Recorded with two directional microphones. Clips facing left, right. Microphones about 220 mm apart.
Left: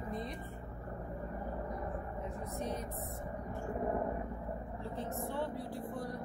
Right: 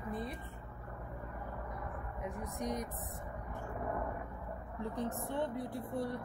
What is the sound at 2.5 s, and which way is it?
Speech, 15° right (ahead or behind).